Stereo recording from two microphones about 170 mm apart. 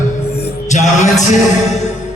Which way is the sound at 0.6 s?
45° left (ahead or behind).